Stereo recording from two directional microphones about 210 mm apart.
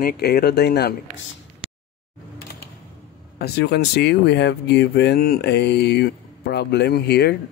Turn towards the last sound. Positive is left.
turn(degrees=50)  # may be behind; listen again after turning